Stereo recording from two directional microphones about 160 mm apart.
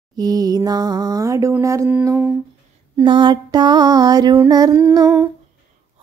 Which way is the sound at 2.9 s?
30° right (ahead or behind).